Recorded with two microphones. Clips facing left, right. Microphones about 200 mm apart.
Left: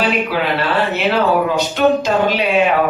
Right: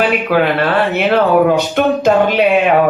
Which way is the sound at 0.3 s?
50° right (ahead or behind).